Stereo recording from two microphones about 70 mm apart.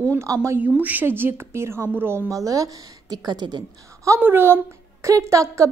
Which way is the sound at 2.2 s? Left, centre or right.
Right.